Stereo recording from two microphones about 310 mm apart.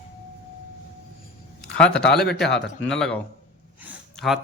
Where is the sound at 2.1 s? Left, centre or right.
Left.